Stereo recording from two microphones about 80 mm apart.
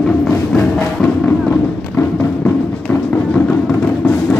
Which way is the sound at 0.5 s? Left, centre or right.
Centre.